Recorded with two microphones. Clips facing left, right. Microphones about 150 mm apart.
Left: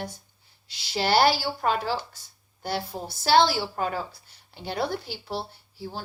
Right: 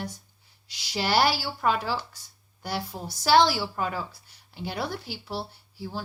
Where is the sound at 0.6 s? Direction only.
10° right (ahead or behind).